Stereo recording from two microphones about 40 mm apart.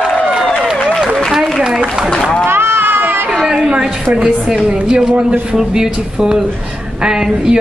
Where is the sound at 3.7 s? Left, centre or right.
Right.